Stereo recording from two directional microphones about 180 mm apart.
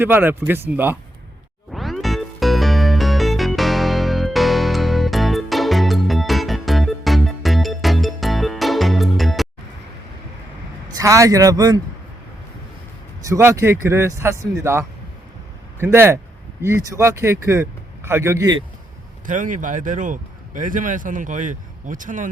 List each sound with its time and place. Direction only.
0.0 s a man's voice: 10° right (ahead or behind)
1.7 s music: centre (ahead or behind)
10.9 s speech: 15° right (ahead or behind)
13.2 s a man's voice: 15° right (ahead or behind)
19.2 s speech: 45° right (ahead or behind)